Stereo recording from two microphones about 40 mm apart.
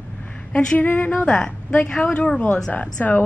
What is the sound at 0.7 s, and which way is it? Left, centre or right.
Speech, left.